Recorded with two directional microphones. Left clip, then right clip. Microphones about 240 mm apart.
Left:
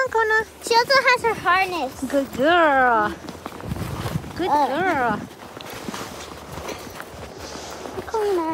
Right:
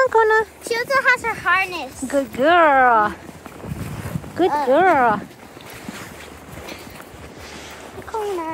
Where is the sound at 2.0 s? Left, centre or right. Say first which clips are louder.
Right 3 dB; centre.